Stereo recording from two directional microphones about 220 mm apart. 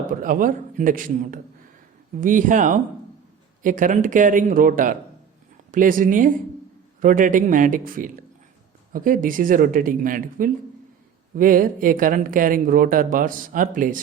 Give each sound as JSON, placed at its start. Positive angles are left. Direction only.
{"t": 0.1, "sound": "speech", "side_deg": -40}